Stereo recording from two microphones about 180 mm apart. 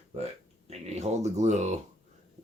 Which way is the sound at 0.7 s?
35° right (ahead or behind).